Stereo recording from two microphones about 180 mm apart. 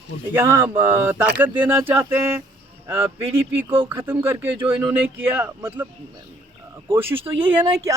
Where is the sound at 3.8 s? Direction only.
10° right (ahead or behind).